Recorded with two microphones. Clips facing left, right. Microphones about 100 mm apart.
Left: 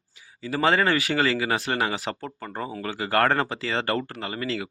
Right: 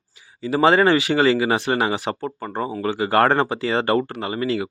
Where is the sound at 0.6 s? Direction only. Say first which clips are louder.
Right 6 dB; 30° right (ahead or behind).